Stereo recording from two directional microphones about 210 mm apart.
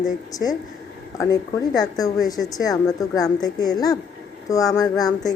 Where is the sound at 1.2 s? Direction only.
15° left (ahead or behind).